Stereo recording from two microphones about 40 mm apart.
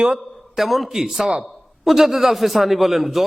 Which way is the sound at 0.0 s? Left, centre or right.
Centre.